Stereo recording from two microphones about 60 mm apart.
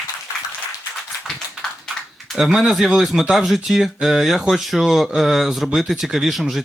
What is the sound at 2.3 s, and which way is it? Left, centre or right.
Speech, centre.